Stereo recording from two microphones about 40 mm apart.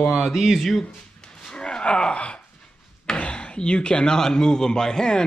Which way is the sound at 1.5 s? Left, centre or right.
Left.